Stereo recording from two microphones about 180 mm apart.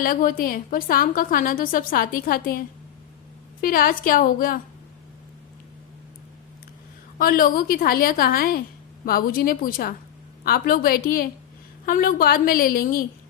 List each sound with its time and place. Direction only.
0.0 s a woman's voice: 50° left (ahead or behind)
7.2 s a woman's voice: 50° left (ahead or behind)